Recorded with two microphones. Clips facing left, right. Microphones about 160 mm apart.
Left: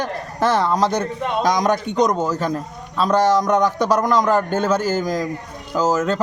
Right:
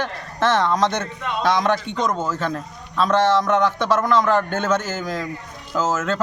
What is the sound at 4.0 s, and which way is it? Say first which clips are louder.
Speech: even; 15° left (ahead or behind).